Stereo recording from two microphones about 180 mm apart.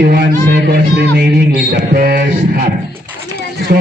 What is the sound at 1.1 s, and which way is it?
Music, 60° right (ahead or behind).